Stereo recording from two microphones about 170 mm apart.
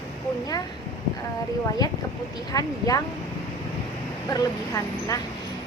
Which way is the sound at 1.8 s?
25° left (ahead or behind).